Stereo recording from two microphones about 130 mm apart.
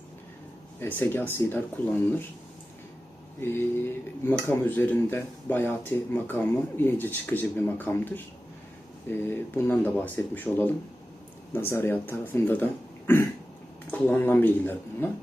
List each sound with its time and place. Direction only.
0.8 s speech: 15° left (ahead or behind)
4.3 s speech: 15° left (ahead or behind)